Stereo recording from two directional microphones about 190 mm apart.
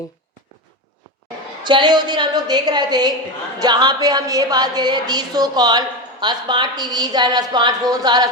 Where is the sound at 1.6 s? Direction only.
25° right (ahead or behind).